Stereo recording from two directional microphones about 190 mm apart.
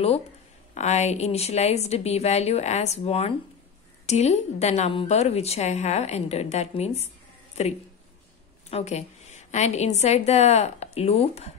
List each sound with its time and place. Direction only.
0.7 s a woman's voice: 35° left (ahead or behind)
8.6 s a woman's voice: 35° left (ahead or behind)